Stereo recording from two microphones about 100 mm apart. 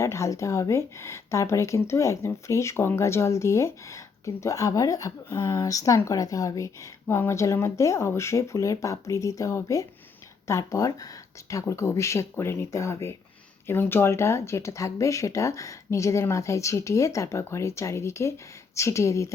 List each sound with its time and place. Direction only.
0.0 s speech: 30° left (ahead or behind)